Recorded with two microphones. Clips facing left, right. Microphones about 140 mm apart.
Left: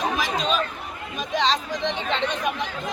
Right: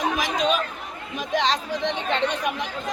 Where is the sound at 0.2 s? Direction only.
15° right (ahead or behind).